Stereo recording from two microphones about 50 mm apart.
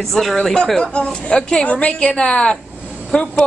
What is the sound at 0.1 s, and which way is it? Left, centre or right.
Speech, centre.